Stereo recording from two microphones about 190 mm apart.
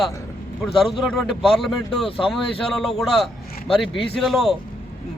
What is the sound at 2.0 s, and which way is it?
Speech, 30° left (ahead or behind).